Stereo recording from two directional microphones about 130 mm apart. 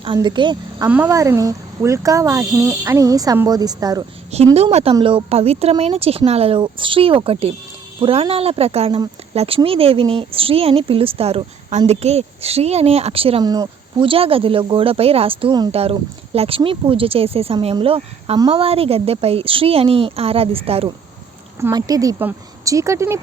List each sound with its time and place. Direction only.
0.0 s speech: 35° right (ahead or behind)
0.9 s speech: 10° right (ahead or behind)
1.1 s speech: 25° right (ahead or behind)
4.3 s speech: 55° right (ahead or behind)
13.4 s speech: 30° right (ahead or behind)
14.1 s speech: 45° right (ahead or behind)
21.7 s speech: 30° right (ahead or behind)